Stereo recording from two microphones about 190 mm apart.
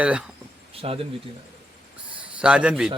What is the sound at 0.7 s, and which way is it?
Speech, 30° right (ahead or behind).